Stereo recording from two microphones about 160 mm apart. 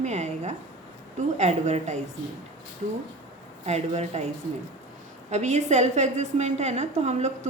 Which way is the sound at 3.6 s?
45° right (ahead or behind).